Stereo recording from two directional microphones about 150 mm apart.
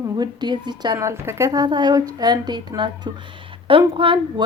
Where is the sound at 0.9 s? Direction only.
15° right (ahead or behind).